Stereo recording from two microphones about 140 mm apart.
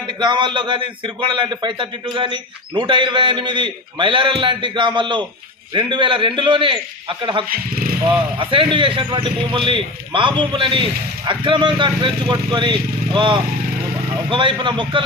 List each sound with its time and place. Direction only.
0.2 s a man's voice: 35° right (ahead or behind)
7.4 s speech: 90° right
8.4 s a man's voice: 35° right (ahead or behind)